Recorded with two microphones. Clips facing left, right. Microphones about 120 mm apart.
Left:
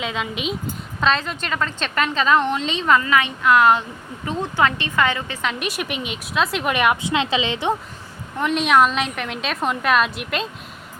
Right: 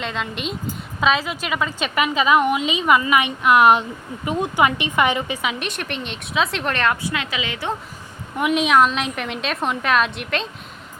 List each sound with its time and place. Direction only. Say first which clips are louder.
0.0 s a woman's voice: left 1 dB; 5° left (ahead or behind)
5.5 s a woman's voice: left 2 dB; 5° left (ahead or behind); by 7.7 s 25° left (ahead or behind)
8.4 s a woman's voice: even; 5° right (ahead or behind)